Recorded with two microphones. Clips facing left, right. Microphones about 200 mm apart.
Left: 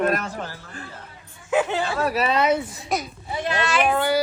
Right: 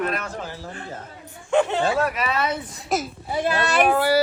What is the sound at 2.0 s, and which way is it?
Speech, 30° left (ahead or behind).